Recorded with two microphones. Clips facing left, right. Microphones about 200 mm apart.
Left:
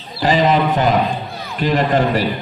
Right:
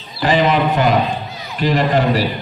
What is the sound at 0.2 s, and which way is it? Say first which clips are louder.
A man's voice: even; 35° left (ahead or behind).